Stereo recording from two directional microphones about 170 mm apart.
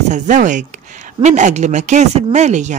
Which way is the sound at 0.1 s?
45° right (ahead or behind).